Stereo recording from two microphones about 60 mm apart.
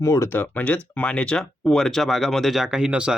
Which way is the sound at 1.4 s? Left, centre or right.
Centre.